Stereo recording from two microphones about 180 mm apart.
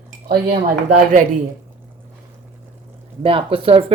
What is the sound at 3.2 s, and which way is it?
Speech, 30° right (ahead or behind).